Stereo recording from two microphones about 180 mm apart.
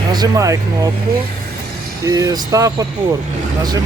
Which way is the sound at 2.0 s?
20° right (ahead or behind).